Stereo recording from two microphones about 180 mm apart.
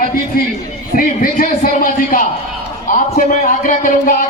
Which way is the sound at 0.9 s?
50° left (ahead or behind).